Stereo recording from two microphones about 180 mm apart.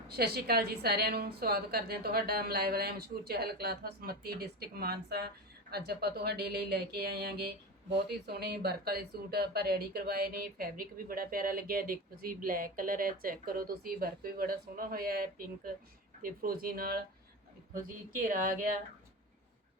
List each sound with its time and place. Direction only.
0.1 s speech: 60° right (ahead or behind)